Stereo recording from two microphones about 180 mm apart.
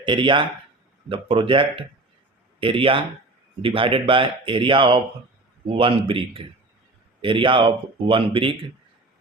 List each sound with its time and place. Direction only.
0.0 s a man's voice: 25° right (ahead or behind)